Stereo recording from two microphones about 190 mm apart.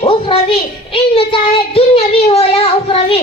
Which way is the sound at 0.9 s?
30° left (ahead or behind).